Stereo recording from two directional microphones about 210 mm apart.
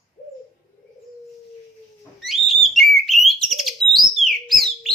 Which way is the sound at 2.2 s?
Centre (ahead or behind).